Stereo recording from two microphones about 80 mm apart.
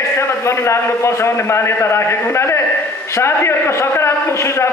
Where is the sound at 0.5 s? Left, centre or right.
Left.